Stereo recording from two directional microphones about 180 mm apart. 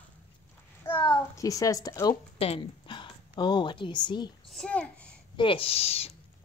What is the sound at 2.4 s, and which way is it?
Speech, 30° left (ahead or behind).